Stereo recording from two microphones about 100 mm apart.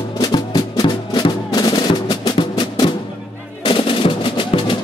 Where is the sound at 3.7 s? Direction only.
60° left (ahead or behind).